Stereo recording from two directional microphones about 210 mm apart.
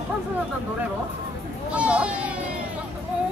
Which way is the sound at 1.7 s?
5° right (ahead or behind).